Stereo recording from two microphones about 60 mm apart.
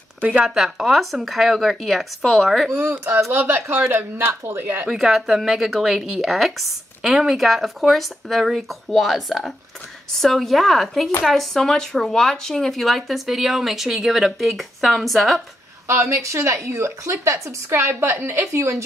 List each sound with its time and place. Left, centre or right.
0.2 s speech: right
0.6 s speech: centre
2.7 s speech: right
4.9 s speech: centre
15.9 s a woman's voice: right